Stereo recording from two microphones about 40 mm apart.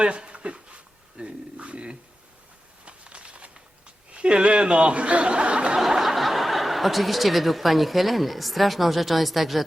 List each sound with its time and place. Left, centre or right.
0.0 s a sound: right
4.1 s speech: right
5.7 s speech: centre